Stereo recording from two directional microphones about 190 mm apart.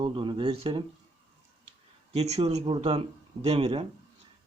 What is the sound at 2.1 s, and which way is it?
Speech, 35° right (ahead or behind).